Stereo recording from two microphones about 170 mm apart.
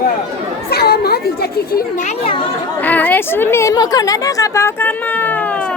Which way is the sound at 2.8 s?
10° left (ahead or behind).